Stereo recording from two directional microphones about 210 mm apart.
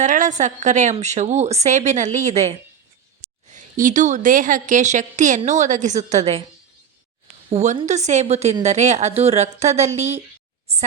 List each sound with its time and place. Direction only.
0.0 s a woman's voice: 35° right (ahead or behind)
7.5 s a woman's voice: 30° right (ahead or behind)